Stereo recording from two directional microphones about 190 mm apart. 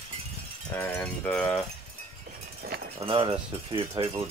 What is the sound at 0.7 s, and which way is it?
Speech, 10° left (ahead or behind).